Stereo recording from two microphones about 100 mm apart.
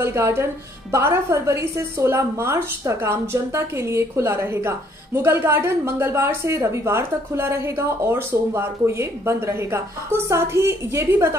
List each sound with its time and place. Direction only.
0.0 s a woman's voice: 25° right (ahead or behind)